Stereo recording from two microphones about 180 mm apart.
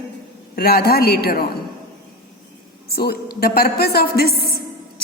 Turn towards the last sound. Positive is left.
turn(degrees=60)  # may be behind; listen again after turning